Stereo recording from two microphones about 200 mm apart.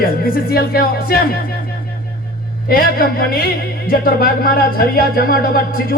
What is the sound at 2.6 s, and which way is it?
A man's voice, 45° left (ahead or behind).